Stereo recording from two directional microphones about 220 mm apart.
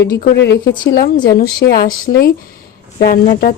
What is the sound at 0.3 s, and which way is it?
A woman's voice, 50° left (ahead or behind).